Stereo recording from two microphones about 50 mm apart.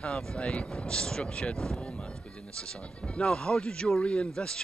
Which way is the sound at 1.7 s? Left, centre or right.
Left.